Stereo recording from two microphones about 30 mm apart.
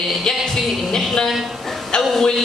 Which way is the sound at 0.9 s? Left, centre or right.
Centre.